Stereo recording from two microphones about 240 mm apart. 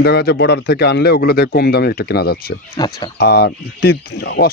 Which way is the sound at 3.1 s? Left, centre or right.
Left.